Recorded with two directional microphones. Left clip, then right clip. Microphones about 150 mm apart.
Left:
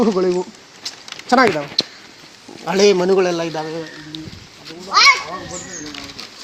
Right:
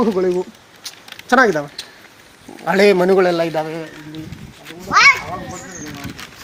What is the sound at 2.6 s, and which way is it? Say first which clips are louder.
A man's voice: right 1 dB; 20° right (ahead or behind).